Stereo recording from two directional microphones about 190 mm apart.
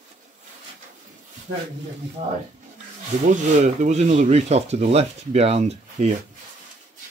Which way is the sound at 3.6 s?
35° right (ahead or behind).